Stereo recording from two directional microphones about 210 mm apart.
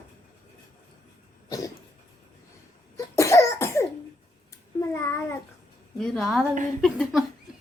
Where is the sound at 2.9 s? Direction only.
15° left (ahead or behind).